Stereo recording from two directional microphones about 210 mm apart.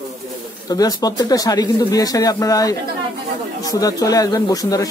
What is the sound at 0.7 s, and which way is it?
Speech, 20° left (ahead or behind).